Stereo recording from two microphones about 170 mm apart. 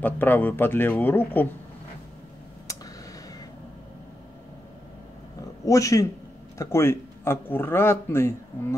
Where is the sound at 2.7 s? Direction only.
20° left (ahead or behind).